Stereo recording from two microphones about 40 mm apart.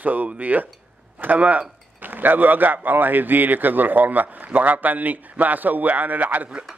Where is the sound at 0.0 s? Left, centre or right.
Right.